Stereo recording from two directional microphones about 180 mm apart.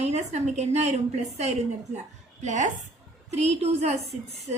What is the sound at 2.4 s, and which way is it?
A woman's voice, 40° right (ahead or behind).